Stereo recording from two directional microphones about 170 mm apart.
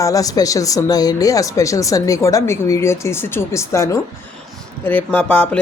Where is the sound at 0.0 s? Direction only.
20° left (ahead or behind).